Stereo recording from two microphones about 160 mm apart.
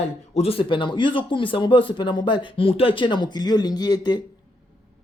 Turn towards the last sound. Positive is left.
turn(degrees=25)  # may be behind; listen again after turning